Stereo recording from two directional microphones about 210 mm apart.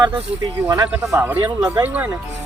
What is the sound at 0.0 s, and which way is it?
Speech, 15° right (ahead or behind).